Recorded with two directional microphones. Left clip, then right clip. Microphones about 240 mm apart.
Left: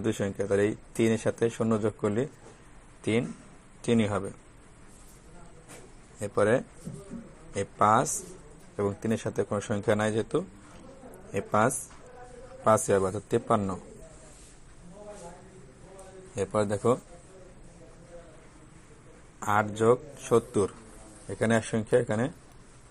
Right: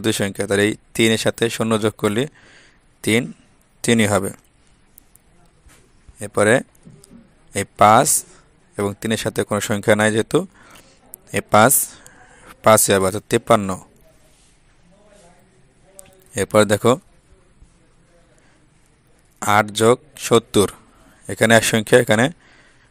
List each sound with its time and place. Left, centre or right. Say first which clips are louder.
0.0 s a man's voice: right 9 dB; right
6.1 s a man's voice: right 9 dB; right
16.3 s a man's voice: right 13 dB; right
19.4 s a man's voice: right 9 dB; right